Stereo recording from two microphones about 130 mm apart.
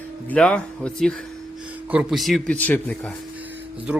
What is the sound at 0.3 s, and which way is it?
Speech, 10° left (ahead or behind).